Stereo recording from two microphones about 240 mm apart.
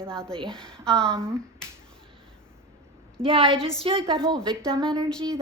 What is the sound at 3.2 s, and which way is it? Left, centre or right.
Speech, right.